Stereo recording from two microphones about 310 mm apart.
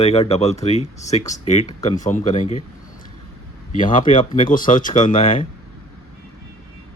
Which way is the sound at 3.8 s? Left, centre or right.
Left.